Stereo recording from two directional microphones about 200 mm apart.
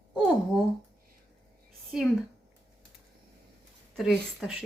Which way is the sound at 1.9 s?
Centre (ahead or behind).